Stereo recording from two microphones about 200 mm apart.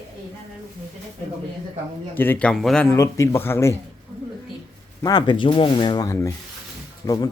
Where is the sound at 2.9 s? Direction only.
15° left (ahead or behind).